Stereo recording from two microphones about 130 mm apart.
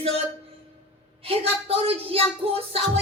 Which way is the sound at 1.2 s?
45° right (ahead or behind).